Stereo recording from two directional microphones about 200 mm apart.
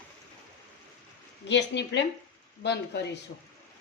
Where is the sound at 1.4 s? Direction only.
60° left (ahead or behind).